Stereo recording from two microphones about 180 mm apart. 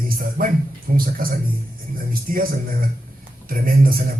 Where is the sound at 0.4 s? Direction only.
50° right (ahead or behind).